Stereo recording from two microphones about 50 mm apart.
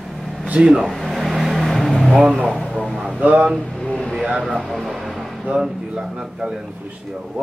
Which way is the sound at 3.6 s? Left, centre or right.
Centre.